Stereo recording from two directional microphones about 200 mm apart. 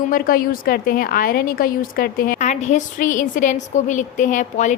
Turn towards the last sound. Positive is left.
turn(degrees=40)  # may be behind; listen again after turning